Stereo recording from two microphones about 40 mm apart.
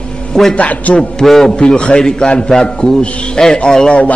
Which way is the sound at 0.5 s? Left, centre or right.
Left.